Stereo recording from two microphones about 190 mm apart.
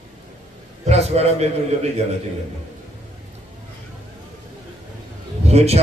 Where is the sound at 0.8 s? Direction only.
35° right (ahead or behind).